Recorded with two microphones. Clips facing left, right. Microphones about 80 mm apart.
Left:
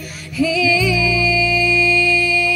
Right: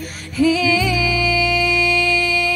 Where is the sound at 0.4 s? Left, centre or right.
Right.